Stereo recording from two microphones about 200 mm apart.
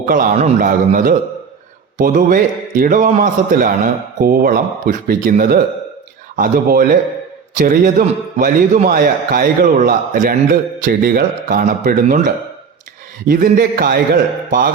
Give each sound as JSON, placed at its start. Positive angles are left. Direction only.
{"t": 0.0, "sound": "a man's voice", "side_deg": -40}